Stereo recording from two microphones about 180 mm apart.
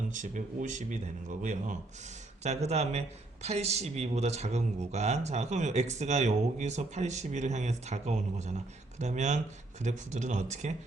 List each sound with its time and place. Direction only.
0.1 s speech: 45° right (ahead or behind)